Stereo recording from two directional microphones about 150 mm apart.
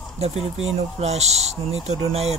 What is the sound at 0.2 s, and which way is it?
Speech, 45° right (ahead or behind).